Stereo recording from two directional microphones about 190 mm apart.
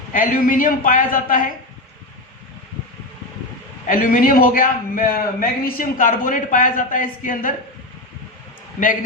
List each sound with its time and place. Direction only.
0.1 s a man's voice: 45° left (ahead or behind)
3.8 s a man's voice: 45° left (ahead or behind)